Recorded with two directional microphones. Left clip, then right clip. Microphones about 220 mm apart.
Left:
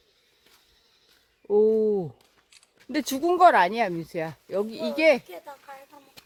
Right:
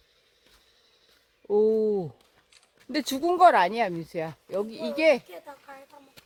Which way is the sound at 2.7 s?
10° left (ahead or behind).